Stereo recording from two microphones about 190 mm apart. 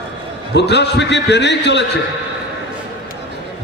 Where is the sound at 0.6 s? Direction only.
65° left (ahead or behind).